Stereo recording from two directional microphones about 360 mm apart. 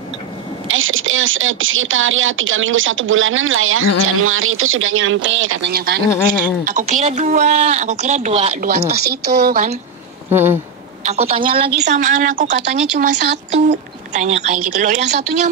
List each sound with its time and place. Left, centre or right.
0.7 s a woman's voice: right
10.3 s speech: centre
11.1 s a woman's voice: centre